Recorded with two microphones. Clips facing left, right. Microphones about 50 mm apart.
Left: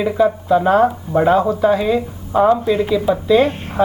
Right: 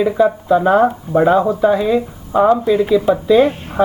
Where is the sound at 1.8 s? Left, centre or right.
Centre.